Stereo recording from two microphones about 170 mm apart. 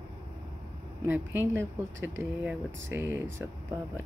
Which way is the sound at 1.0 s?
10° right (ahead or behind).